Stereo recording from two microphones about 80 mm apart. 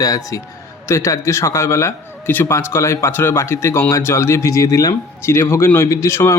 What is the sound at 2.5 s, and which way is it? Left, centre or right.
A man's voice, left.